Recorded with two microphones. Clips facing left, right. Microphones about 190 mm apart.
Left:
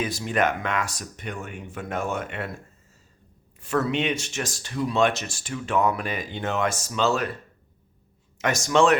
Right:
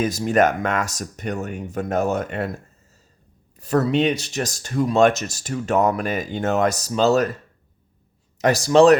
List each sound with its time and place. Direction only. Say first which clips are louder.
0.0 s speech: right 6 dB; 45° right (ahead or behind)
3.6 s speech: right 6 dB; 40° right (ahead or behind)
8.4 s speech: right 6 dB; 35° right (ahead or behind)